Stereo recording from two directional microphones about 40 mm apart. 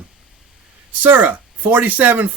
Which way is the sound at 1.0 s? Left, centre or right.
Right.